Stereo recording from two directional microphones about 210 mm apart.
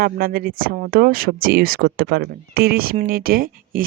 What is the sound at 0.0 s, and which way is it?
Speech, 45° right (ahead or behind).